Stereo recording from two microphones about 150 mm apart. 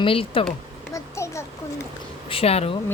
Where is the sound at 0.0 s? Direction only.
35° left (ahead or behind).